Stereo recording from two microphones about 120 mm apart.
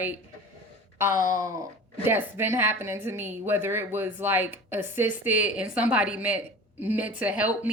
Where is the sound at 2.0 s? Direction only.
20° right (ahead or behind).